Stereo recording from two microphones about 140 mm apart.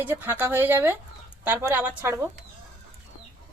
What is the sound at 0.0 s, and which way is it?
Speech, 15° right (ahead or behind).